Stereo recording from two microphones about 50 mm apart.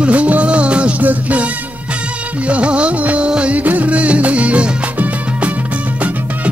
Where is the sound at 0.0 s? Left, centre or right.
Right.